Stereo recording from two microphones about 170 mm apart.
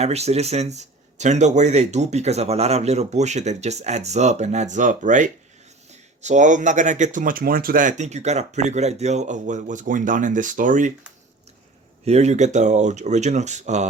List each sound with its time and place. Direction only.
0.0 s speech: 40° right (ahead or behind)
12.0 s speech: 40° right (ahead or behind)